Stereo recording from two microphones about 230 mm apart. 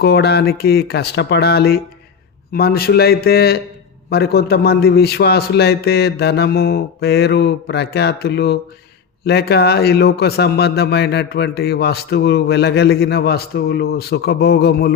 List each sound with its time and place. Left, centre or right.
0.0 s a man's voice: left